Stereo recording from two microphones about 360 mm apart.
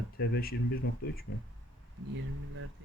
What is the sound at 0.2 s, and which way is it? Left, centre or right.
Speech, left.